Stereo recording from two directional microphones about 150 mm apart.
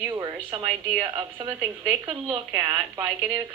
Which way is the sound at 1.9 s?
20° right (ahead or behind).